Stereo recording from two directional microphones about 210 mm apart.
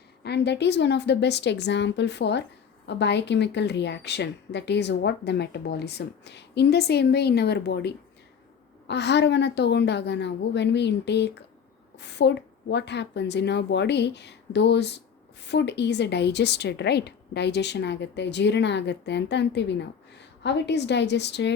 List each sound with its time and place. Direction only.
0.2 s a woman's voice: 55° left (ahead or behind)